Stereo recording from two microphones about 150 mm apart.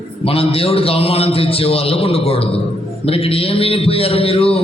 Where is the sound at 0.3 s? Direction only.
40° left (ahead or behind).